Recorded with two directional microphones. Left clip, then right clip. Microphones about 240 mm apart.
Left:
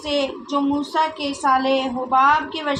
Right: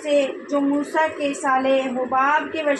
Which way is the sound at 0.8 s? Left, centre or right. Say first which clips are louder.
Even; left.